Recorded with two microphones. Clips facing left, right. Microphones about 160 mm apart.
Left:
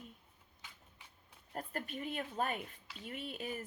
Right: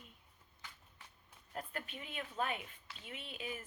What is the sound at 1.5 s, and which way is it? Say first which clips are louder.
A woman's voice: left 3 dB; 40° left (ahead or behind).